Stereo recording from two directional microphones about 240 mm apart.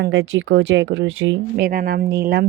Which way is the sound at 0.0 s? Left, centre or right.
Right.